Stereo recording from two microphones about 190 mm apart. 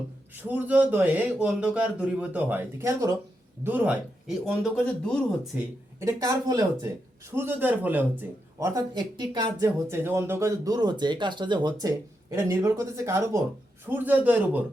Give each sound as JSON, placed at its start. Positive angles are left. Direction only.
{"t": 0.4, "sound": "speech", "side_deg": -10}
{"t": 5.5, "sound": "speech", "side_deg": -15}